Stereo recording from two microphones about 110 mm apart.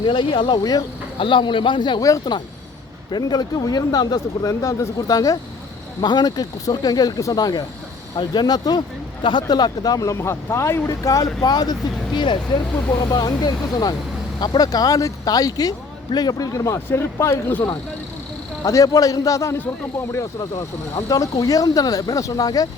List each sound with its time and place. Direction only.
0.0 s a man's voice: 45° left (ahead or behind)
1.2 s a man's voice: 50° left (ahead or behind)
2.0 s speech: 30° left (ahead or behind)